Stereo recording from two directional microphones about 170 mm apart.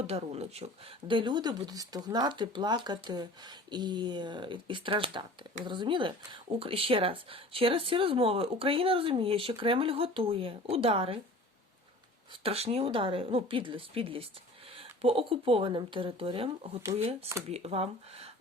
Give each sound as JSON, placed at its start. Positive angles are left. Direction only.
{"t": 0.0, "sound": "speech", "side_deg": -40}
{"t": 12.3, "sound": "speech", "side_deg": -35}